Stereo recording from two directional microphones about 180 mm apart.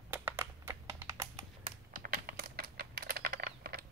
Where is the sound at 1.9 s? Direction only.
55° right (ahead or behind).